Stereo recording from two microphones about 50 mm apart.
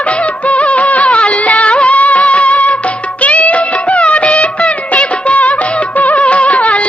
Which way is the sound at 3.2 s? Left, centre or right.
Left.